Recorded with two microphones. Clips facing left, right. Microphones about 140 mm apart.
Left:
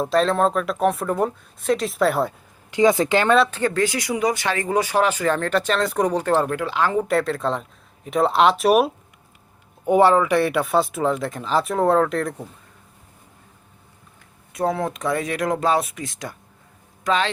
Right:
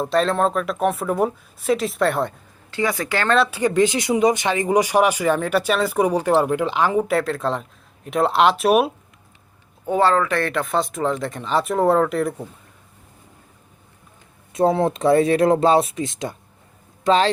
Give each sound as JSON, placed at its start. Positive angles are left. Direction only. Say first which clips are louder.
{"t": 0.0, "sound": "speech", "louder": "even", "side_deg": 0}
{"t": 2.6, "sound": "a woman's voice", "louder": "left 6 dB", "side_deg": 20}
{"t": 3.3, "sound": "speech", "louder": "right 3 dB", "side_deg": 0}
{"t": 3.6, "sound": "speech", "louder": "right 3 dB", "side_deg": -20}
{"t": 7.1, "sound": "speech", "louder": "even", "side_deg": 0}
{"t": 9.8, "sound": "speech", "louder": "left 3 dB", "side_deg": 15}
{"t": 14.5, "sound": "speech", "louder": "right 5 dB", "side_deg": -25}